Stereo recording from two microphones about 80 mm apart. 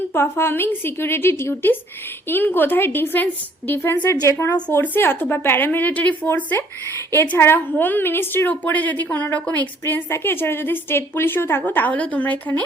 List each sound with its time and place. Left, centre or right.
0.1 s a woman's voice: left
4.1 s a woman's voice: left; by 12.6 s centre